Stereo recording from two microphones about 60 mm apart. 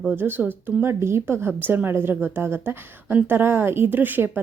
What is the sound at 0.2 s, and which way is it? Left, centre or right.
A woman's voice, right.